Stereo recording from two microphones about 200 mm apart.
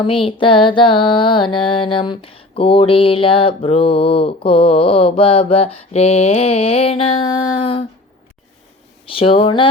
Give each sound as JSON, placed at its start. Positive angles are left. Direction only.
{"t": 0.0, "sound": "music", "side_deg": 25}
{"t": 9.0, "sound": "music", "side_deg": 25}